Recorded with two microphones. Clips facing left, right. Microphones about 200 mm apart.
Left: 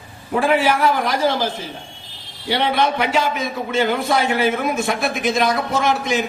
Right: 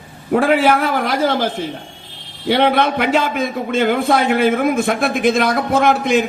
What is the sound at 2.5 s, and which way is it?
A man's voice, 55° right (ahead or behind).